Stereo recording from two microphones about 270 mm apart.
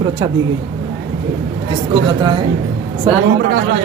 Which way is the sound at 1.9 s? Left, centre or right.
Centre.